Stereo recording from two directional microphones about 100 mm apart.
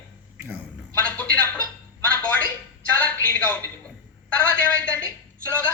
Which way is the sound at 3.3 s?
15° left (ahead or behind).